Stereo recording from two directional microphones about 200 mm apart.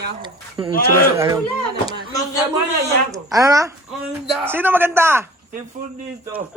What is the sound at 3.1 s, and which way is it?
Speech, 15° right (ahead or behind).